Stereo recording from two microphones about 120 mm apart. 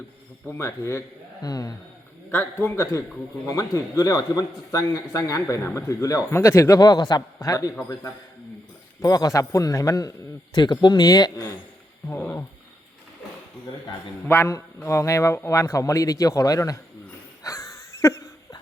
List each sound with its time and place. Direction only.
0.5 s a man's voice: 25° left (ahead or behind)
2.3 s a man's voice: 15° left (ahead or behind)
9.0 s a man's voice: 30° left (ahead or behind)
12.0 s a sound: 15° left (ahead or behind)
14.3 s a man's voice: 20° left (ahead or behind)
17.4 s wheeze: 25° left (ahead or behind)